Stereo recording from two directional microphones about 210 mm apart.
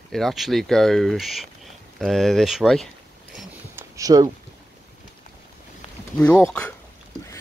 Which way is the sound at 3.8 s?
15° right (ahead or behind).